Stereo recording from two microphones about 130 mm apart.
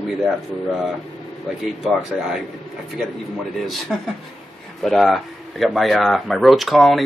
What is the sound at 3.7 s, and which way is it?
Speech, centre (ahead or behind).